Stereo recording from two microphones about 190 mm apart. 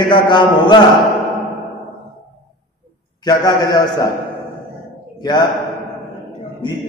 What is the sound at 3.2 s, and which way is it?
Mantra, 20° left (ahead or behind).